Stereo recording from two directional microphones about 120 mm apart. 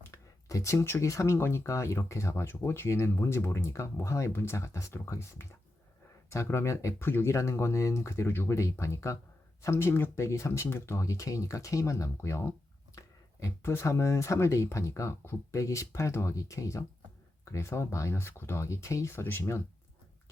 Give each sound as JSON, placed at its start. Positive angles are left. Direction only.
{"t": 0.1, "sound": "speech", "side_deg": 25}